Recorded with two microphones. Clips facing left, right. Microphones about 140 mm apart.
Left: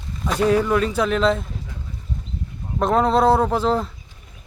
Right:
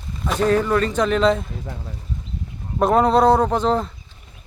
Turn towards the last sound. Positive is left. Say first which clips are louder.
# right 1 dB
turn(degrees=0)  # may be behind; listen again after turning